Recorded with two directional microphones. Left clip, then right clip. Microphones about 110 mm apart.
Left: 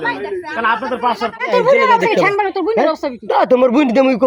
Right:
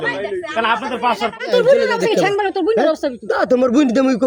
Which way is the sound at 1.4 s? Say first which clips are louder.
Left 1 dB; 15° right (ahead or behind).